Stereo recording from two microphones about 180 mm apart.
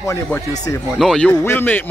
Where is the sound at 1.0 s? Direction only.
5° left (ahead or behind).